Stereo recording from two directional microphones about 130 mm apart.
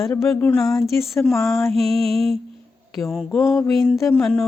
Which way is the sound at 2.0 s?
50° right (ahead or behind).